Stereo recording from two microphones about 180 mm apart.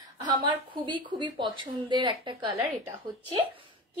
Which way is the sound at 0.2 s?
25° right (ahead or behind).